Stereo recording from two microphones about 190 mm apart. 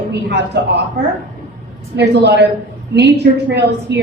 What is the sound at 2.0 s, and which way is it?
A woman's voice, 60° right (ahead or behind).